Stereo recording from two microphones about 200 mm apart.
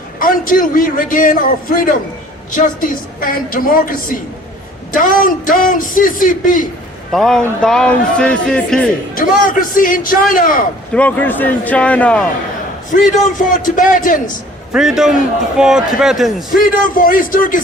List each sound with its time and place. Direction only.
0.2 s a man's voice: 40° left (ahead or behind)
7.1 s a man's voice: centre (ahead or behind)
9.1 s a man's voice: 45° left (ahead or behind)
10.9 s a man's voice: 10° left (ahead or behind)
12.9 s a man's voice: 40° left (ahead or behind)
14.7 s a man's voice: centre (ahead or behind)
16.5 s a man's voice: 40° left (ahead or behind)